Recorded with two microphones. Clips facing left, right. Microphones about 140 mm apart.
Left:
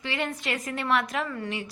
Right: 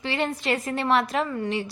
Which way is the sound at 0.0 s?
30° right (ahead or behind).